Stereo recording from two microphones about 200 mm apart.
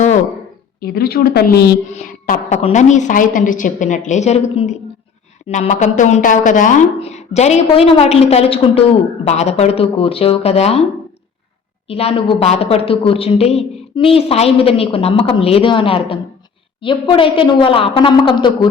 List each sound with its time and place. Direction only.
0.8 s speech: 50° left (ahead or behind)
1.9 s speech: 40° left (ahead or behind)
2.6 s speech: 35° left (ahead or behind)
11.9 s a woman's voice: 30° left (ahead or behind)